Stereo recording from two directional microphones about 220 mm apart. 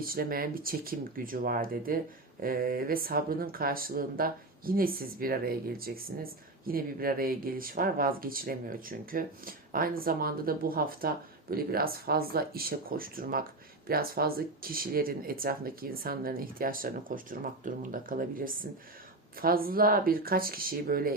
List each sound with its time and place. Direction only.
0.0 s speech: 40° right (ahead or behind)